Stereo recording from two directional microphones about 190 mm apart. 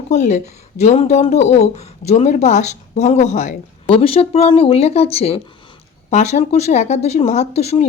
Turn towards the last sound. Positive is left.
turn(degrees=35)  # may be behind; listen again after turning